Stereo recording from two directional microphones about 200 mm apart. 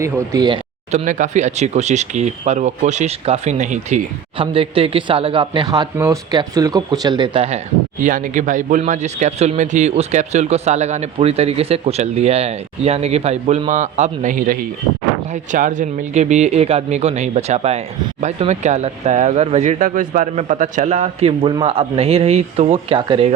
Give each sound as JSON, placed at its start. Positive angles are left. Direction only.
{"t": 0.0, "sound": "speech", "side_deg": -20}
{"t": 0.9, "sound": "speech", "side_deg": -35}
{"t": 8.0, "sound": "speech", "side_deg": -40}